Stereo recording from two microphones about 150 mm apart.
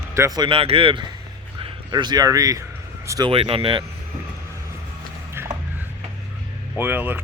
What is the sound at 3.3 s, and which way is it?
Speech, 40° right (ahead or behind).